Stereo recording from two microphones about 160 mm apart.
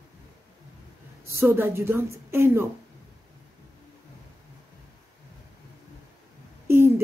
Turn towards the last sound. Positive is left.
turn(degrees=-15)  # may be behind; listen again after turning